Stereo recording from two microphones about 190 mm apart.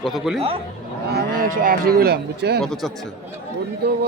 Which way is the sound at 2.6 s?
Centre (ahead or behind).